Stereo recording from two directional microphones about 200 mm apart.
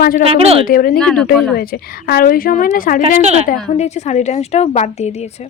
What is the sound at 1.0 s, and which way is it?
Speech, 5° left (ahead or behind).